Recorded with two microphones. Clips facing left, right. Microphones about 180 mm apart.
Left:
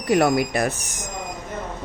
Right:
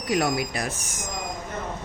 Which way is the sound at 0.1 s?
55° left (ahead or behind).